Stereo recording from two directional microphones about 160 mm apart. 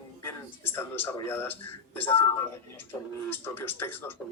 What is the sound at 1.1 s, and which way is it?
Speech, 15° left (ahead or behind).